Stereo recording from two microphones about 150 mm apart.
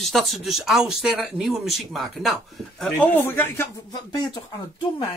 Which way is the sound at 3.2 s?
15° left (ahead or behind).